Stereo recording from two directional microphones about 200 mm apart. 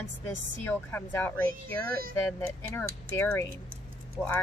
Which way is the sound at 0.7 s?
10° left (ahead or behind).